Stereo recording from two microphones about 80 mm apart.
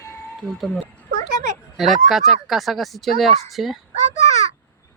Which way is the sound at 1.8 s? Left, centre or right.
Centre.